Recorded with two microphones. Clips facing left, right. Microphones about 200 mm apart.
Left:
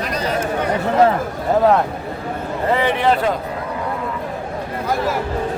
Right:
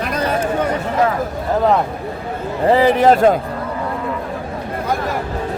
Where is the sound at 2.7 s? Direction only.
35° right (ahead or behind).